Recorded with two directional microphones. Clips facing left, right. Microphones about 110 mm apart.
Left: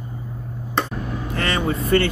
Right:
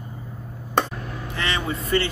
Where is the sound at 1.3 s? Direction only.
50° left (ahead or behind).